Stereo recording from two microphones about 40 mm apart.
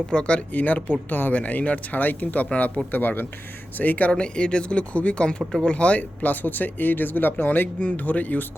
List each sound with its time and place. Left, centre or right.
0.1 s speech: left
0.5 s speech: left
1.3 s speech: left
3.8 s speech: left
4.1 s speech: left